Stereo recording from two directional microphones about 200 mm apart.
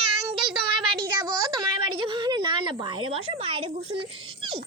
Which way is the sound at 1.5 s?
25° right (ahead or behind).